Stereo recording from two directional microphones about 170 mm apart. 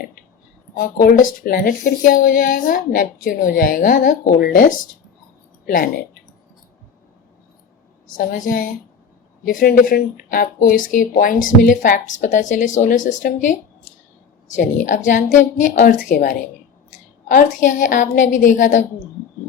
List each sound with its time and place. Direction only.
0.8 s speech: 55° left (ahead or behind)
8.1 s speech: 55° left (ahead or behind)